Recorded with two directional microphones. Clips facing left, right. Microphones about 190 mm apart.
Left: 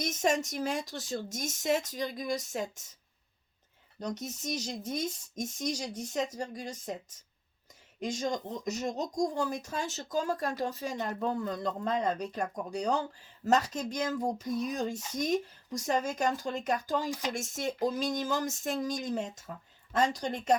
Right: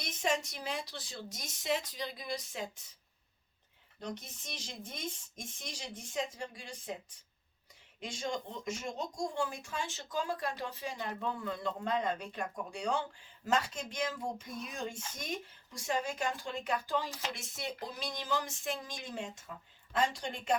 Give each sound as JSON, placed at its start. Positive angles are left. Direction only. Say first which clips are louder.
{"t": 0.0, "sound": "a woman's voice", "louder": "left 5 dB", "side_deg": 45}
{"t": 4.0, "sound": "speech", "louder": "left 7 dB", "side_deg": 40}
{"t": 7.9, "sound": "a woman's voice", "louder": "left 5 dB", "side_deg": 45}
{"t": 17.1, "sound": "speech", "louder": "left 7 dB", "side_deg": 15}
{"t": 17.3, "sound": "a woman's voice", "louder": "left 8 dB", "side_deg": 45}